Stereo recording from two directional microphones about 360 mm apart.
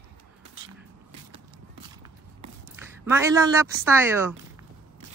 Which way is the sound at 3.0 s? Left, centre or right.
Centre.